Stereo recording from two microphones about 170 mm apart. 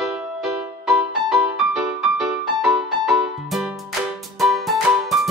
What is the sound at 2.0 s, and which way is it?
Music, centre (ahead or behind).